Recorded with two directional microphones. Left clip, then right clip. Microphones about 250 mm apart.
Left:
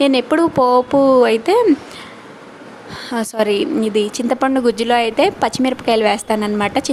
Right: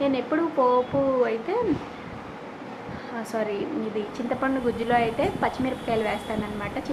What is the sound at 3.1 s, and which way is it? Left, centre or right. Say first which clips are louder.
Speech: left 12 dB; left.